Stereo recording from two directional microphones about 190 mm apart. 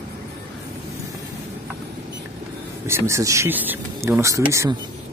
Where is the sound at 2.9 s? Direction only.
15° right (ahead or behind).